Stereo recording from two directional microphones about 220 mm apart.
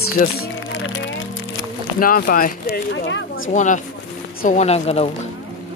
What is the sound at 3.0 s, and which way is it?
Speech, 60° left (ahead or behind).